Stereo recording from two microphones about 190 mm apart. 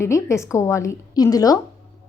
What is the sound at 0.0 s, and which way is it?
A woman's voice, 15° left (ahead or behind).